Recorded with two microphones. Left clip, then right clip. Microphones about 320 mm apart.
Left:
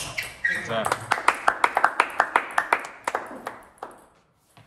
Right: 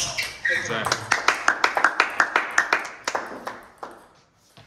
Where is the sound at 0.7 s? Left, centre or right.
Centre.